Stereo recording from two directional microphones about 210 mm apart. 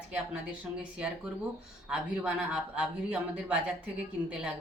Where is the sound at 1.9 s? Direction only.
5° right (ahead or behind).